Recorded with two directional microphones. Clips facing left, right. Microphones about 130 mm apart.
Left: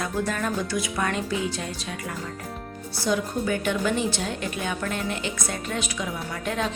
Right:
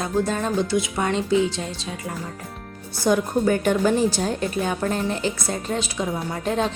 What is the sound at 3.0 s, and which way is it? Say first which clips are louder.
A woman's voice: right 6 dB; 45° right (ahead or behind).